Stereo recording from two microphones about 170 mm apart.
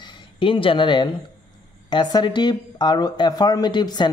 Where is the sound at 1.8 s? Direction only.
25° left (ahead or behind).